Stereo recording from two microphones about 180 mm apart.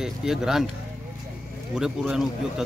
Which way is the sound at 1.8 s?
5° right (ahead or behind).